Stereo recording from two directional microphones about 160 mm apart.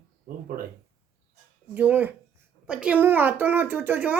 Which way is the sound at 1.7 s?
10° right (ahead or behind).